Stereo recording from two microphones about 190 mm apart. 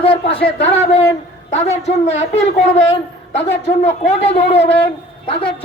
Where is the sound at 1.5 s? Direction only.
35° left (ahead or behind).